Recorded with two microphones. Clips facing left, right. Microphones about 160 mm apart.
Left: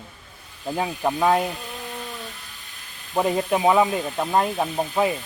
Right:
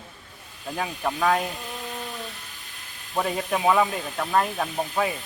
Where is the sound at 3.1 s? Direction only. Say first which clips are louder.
Left 4 dB; 20° left (ahead or behind).